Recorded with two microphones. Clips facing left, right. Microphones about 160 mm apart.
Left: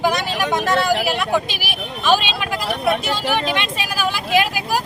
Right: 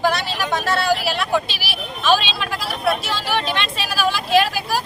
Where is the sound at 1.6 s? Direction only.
15° left (ahead or behind).